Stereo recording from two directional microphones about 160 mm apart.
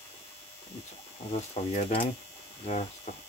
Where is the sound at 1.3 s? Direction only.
40° left (ahead or behind).